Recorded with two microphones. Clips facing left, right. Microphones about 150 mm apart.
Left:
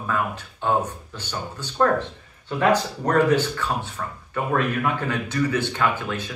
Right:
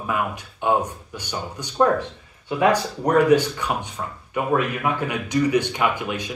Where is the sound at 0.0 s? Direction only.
15° right (ahead or behind).